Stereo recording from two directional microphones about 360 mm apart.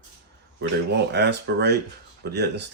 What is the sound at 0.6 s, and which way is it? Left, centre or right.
Speech, right.